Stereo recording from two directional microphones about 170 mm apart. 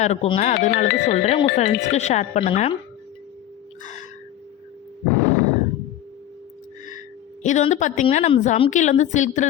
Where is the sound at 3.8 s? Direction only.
45° left (ahead or behind).